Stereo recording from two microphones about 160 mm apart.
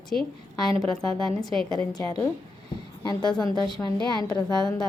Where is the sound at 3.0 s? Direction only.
25° left (ahead or behind).